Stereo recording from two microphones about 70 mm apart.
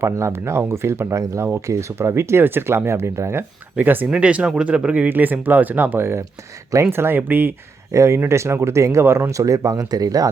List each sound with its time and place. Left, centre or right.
0.0 s speech: right
3.8 s speech: right
5.0 s speech: right
7.9 s speech: right
9.0 s speech: right
9.3 s speech: right